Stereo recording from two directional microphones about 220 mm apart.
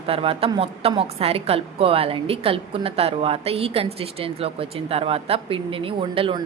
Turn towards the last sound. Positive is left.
turn(degrees=-25)  # may be behind; listen again after turning